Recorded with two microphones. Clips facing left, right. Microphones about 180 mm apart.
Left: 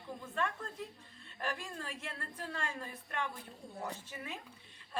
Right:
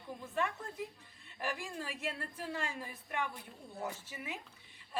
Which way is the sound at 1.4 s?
10° right (ahead or behind).